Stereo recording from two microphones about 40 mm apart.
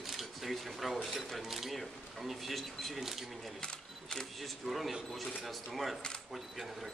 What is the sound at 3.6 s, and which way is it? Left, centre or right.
Camera, left.